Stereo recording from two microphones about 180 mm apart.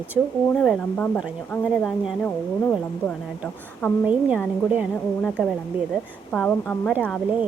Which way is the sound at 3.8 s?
10° left (ahead or behind).